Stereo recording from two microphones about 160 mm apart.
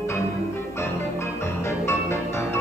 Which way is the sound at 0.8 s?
15° left (ahead or behind).